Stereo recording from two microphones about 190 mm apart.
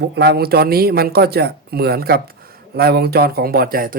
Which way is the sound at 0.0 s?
55° right (ahead or behind).